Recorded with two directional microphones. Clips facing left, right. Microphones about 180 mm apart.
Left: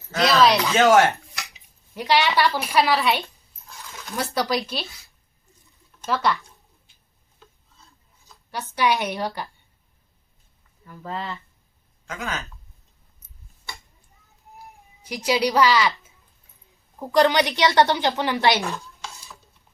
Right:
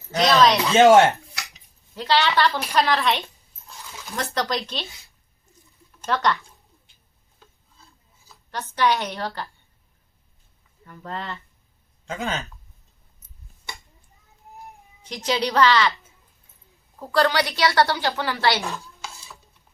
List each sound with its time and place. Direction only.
0.2 s speech: centre (ahead or behind)
0.7 s speech: 20° right (ahead or behind)
2.0 s a woman's voice: 15° left (ahead or behind)
2.8 s speech: 5° left (ahead or behind)
3.7 s a sound: 15° right (ahead or behind)
4.0 s a woman's voice: 5° left (ahead or behind)
6.0 s speech: centre (ahead or behind)
8.4 s a woman's voice: 10° left (ahead or behind)
10.8 s speech: centre (ahead or behind)
12.0 s speech: 25° right (ahead or behind)
15.0 s a woman's voice: 10° left (ahead or behind)
17.0 s a woman's voice: 15° left (ahead or behind)
18.6 s stir: centre (ahead or behind)